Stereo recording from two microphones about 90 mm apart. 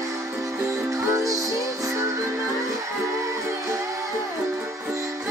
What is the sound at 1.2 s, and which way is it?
Music, 40° right (ahead or behind).